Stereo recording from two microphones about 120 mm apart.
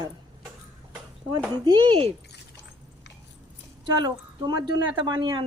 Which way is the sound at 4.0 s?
35° right (ahead or behind).